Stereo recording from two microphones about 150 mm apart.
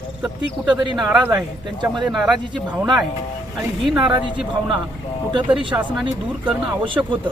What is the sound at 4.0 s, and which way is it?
Speech, 30° right (ahead or behind).